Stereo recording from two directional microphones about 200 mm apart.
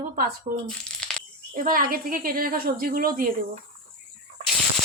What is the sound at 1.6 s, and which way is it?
A woman's voice, 45° right (ahead or behind).